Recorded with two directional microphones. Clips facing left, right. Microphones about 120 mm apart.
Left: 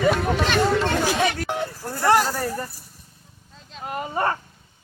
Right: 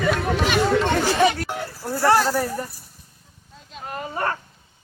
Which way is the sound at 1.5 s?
20° left (ahead or behind).